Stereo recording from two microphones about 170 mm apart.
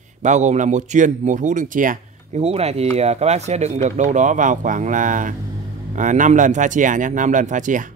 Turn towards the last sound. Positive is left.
turn(degrees=-50)  # may be behind; listen again after turning